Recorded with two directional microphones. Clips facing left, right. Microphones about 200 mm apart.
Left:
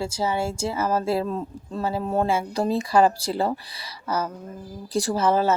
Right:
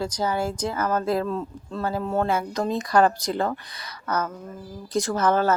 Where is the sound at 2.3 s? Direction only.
25° left (ahead or behind).